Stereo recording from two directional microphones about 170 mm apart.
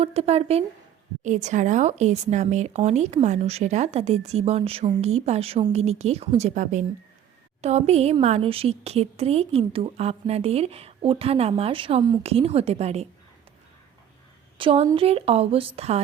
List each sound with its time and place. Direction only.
0.0 s speech: 35° right (ahead or behind)
14.6 s speech: 35° right (ahead or behind)